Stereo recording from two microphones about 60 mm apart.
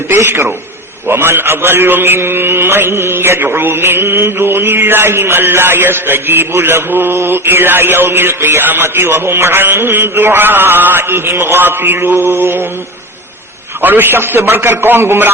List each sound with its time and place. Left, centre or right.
0.1 s a man's voice: right
13.8 s a man's voice: right